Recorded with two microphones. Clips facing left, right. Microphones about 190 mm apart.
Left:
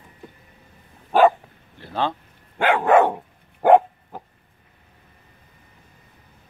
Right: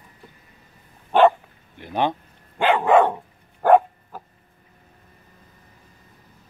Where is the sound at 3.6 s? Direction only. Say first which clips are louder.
Left 1 dB; 20° left (ahead or behind).